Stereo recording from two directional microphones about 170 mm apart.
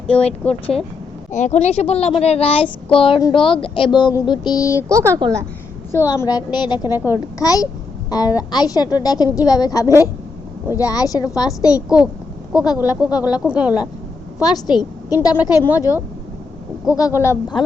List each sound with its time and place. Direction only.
0.2 s a child's voice: 40° left (ahead or behind); by 4.9 s 20° left (ahead or behind)
4.9 s a woman's voice: 15° right (ahead or behind)
5.9 s a woman's voice: 15° left (ahead or behind)
13.4 s a woman's voice: 5° right (ahead or behind)
14.4 s a woman's voice: 25° left (ahead or behind)